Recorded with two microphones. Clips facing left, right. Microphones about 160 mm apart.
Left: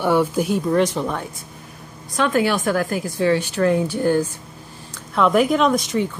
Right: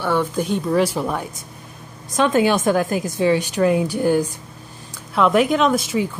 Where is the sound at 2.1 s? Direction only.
20° right (ahead or behind).